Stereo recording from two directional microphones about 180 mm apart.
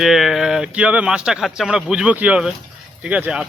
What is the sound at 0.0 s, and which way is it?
Speech, centre (ahead or behind).